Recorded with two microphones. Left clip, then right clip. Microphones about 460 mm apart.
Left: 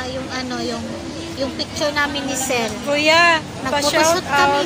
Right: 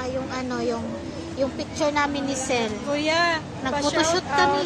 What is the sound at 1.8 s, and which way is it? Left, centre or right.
Speech, right.